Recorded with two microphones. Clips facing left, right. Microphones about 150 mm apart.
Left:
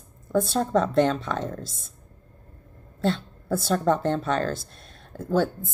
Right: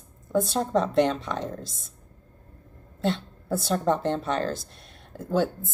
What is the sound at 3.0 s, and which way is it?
A woman's voice, 20° right (ahead or behind).